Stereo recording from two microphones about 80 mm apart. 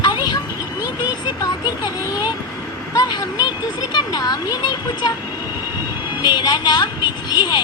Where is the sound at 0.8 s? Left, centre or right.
Left.